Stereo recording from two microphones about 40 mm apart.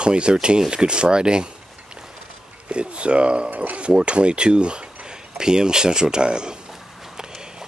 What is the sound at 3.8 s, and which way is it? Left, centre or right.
Speech, right.